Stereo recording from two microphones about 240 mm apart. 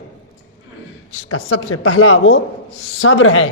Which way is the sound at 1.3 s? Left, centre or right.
Left.